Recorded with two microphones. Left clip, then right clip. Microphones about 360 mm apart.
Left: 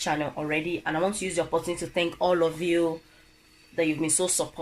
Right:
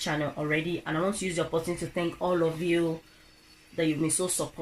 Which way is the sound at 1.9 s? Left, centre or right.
Left.